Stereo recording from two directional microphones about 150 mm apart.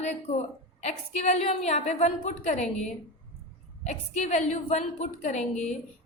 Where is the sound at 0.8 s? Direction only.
45° left (ahead or behind).